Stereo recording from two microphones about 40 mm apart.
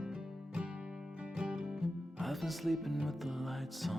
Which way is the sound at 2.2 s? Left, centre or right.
Centre.